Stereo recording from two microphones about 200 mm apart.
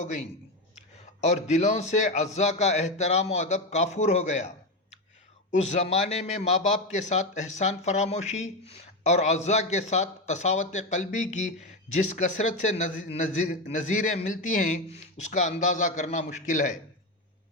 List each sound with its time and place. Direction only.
0.0 s speech: 35° left (ahead or behind)